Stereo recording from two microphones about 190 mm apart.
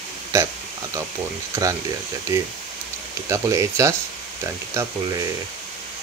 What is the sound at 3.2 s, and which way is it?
Speech, 15° right (ahead or behind).